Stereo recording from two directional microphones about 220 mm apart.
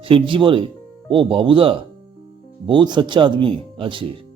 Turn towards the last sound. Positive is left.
turn(degrees=-20)  # may be behind; listen again after turning